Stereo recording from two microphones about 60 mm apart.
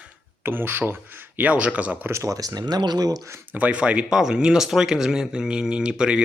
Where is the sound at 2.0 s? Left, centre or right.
Right.